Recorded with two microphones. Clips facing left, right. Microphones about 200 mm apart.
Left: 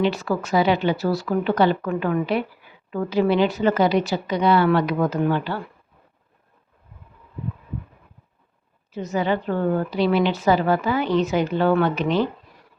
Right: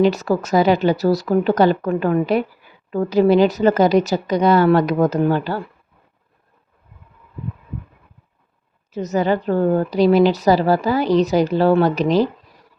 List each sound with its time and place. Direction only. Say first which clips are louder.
0.0 s a woman's voice: right 5 dB; 40° right (ahead or behind)
8.9 s a woman's voice: right 4 dB; 40° right (ahead or behind)